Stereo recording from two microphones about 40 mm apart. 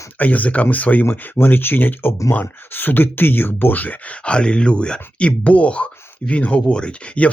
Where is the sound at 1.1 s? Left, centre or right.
Left.